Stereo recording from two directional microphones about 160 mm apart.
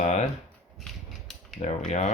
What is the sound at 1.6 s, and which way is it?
Speech, 45° left (ahead or behind).